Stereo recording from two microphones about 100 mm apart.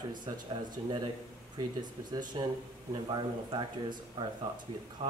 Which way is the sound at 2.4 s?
60° right (ahead or behind).